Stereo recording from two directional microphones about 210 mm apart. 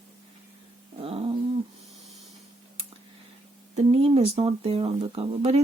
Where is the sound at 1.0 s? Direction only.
25° right (ahead or behind).